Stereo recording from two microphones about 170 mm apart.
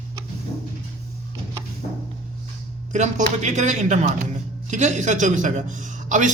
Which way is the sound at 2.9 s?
45° right (ahead or behind).